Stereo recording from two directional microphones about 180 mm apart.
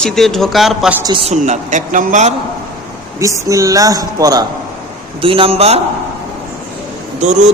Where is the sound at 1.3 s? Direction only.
40° right (ahead or behind).